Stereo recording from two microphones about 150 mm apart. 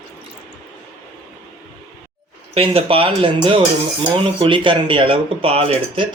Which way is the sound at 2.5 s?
40° right (ahead or behind).